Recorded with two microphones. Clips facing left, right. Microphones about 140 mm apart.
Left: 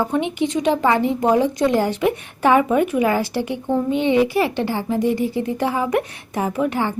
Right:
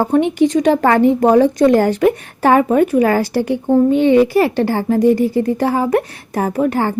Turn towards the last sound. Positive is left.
turn(degrees=-40)  # may be behind; listen again after turning